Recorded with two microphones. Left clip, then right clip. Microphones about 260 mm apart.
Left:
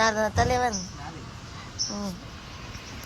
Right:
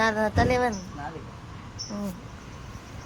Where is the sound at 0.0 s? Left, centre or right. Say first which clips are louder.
Even; left.